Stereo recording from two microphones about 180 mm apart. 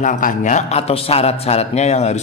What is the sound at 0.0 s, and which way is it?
A man's voice, 45° left (ahead or behind).